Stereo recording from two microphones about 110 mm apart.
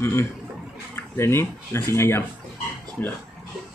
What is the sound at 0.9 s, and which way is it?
Speech, 25° left (ahead or behind).